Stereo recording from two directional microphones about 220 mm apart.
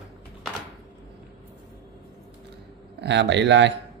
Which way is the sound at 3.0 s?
50° right (ahead or behind).